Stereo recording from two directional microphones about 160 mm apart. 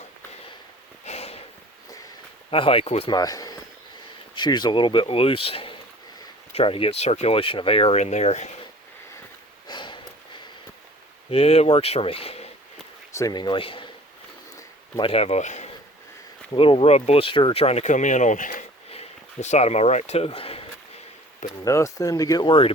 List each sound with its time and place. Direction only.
1.0 s a sound: 40° left (ahead or behind)
2.5 s speech: 35° left (ahead or behind)
3.1 s speech: 25° left (ahead or behind); by 8.4 s 45° left (ahead or behind)
9.6 s sniff: 30° left (ahead or behind)
11.3 s speech: 40° left (ahead or behind)
13.1 s speech: 25° left (ahead or behind)
14.9 s speech: 35° left (ahead or behind)
16.5 s speech: 35° left (ahead or behind); by 18.6 s 55° left (ahead or behind)
18.9 s a sound: 45° left (ahead or behind)
21.6 s speech: 20° left (ahead or behind)